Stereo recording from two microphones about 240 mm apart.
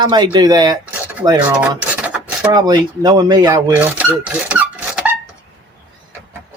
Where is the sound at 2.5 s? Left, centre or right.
Centre.